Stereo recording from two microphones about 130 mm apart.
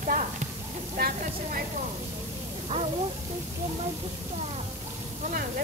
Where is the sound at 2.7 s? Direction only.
55° right (ahead or behind).